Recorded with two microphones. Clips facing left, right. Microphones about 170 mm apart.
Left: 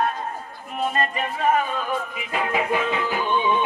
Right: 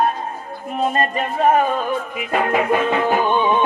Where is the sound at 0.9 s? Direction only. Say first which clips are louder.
Right 5 dB; 50° right (ahead or behind).